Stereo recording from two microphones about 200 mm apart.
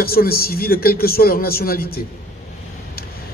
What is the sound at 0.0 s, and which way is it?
A man's voice, 50° left (ahead or behind).